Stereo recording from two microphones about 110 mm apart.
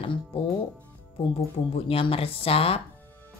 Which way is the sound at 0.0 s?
55° left (ahead or behind).